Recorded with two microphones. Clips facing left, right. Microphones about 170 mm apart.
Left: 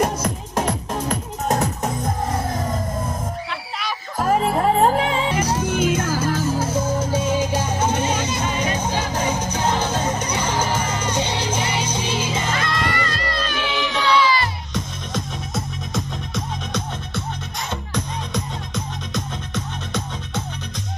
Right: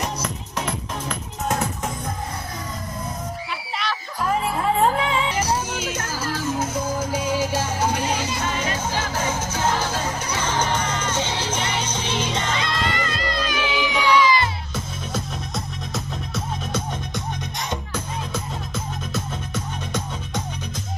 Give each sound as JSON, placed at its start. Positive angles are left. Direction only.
{"t": 0.0, "sound": "music", "side_deg": 50}
{"t": 4.2, "sound": "music", "side_deg": 45}
{"t": 5.7, "sound": "music", "side_deg": 55}
{"t": 6.5, "sound": "music", "side_deg": 30}
{"t": 12.5, "sound": "music", "side_deg": -20}
{"t": 15.1, "sound": "music", "side_deg": -5}
{"t": 19.1, "sound": "music", "side_deg": -10}